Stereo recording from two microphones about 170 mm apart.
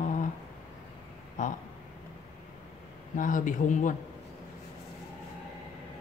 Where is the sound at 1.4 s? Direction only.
45° left (ahead or behind).